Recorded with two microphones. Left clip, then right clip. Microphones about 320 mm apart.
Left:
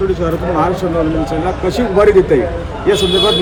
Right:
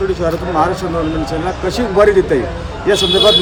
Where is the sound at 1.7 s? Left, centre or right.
Centre.